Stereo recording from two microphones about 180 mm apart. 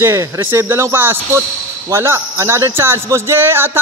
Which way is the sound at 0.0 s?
15° right (ahead or behind).